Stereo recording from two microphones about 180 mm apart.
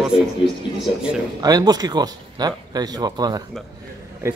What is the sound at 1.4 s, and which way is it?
Speech, 20° right (ahead or behind).